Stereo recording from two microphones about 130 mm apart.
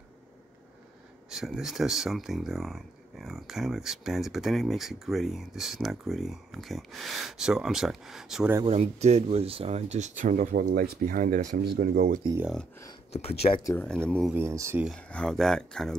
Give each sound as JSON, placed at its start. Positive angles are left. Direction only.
{"t": 1.3, "sound": "speech", "side_deg": -5}
{"t": 8.6, "sound": "speech", "side_deg": -55}
{"t": 12.2, "sound": "speech", "side_deg": -40}
{"t": 13.1, "sound": "speech", "side_deg": 50}
{"t": 13.7, "sound": "speech", "side_deg": 5}
{"t": 14.3, "sound": "speech", "side_deg": -20}
{"t": 15.0, "sound": "speech", "side_deg": 10}